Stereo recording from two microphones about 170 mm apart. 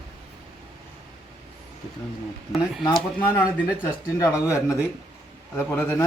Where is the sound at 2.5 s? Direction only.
Centre (ahead or behind).